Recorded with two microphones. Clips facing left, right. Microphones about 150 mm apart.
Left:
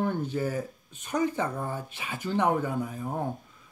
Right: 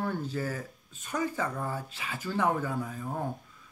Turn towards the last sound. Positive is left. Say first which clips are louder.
# left 3 dB
turn(degrees=20)  # may be behind; listen again after turning